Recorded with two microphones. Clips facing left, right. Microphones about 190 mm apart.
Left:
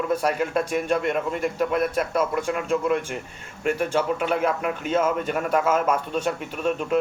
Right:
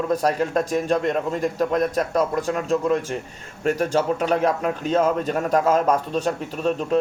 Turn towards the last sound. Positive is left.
turn(degrees=-35)  # may be behind; listen again after turning